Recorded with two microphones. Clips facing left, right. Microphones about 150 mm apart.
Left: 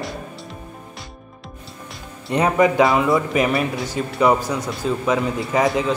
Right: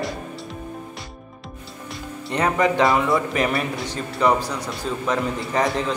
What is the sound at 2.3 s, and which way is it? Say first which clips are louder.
A man's voice: left 4 dB; 10° left (ahead or behind).